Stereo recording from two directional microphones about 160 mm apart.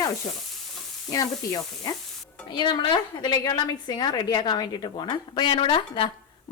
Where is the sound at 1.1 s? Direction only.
25° left (ahead or behind).